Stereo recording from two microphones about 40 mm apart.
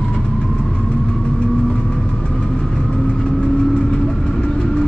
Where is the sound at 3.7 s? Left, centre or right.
Left.